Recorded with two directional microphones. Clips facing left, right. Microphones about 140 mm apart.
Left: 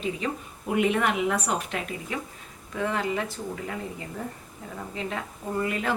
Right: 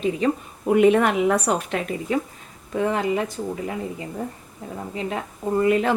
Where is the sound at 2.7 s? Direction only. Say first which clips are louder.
Right 6 dB; 25° right (ahead or behind).